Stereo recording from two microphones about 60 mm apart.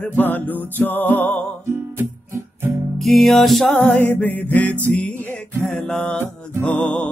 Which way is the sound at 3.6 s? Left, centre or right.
Left.